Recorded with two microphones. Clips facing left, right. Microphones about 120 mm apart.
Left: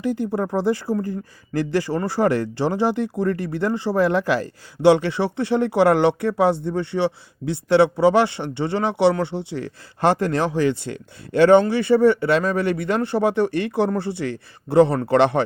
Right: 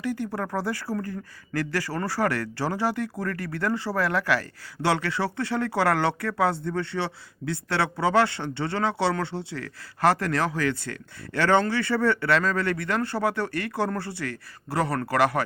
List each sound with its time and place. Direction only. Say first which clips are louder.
0.0 s speech: left 6 dB; 20° left (ahead or behind)